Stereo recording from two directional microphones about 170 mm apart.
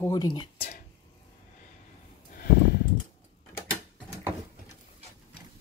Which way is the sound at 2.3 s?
65° left (ahead or behind).